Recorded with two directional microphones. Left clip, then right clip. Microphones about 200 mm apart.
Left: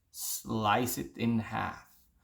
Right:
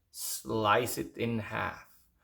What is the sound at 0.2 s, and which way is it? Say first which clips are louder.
Speech: right 2 dB; 20° right (ahead or behind).